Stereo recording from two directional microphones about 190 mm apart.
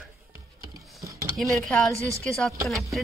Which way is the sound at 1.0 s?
15° right (ahead or behind).